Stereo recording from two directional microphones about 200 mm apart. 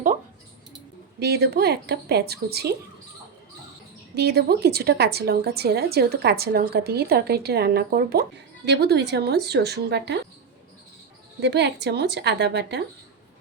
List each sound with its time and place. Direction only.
1.2 s a woman's voice: 55° right (ahead or behind)
4.1 s a woman's voice: 55° right (ahead or behind)
11.3 s a woman's voice: 60° right (ahead or behind)